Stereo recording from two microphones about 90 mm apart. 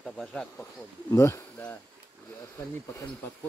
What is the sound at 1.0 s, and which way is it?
Speech, 40° left (ahead or behind).